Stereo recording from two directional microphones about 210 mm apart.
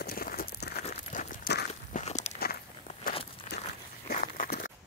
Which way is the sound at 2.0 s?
30° left (ahead or behind).